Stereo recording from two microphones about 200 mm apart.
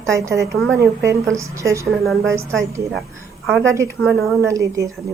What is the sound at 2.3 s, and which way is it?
Speech, 15° right (ahead or behind).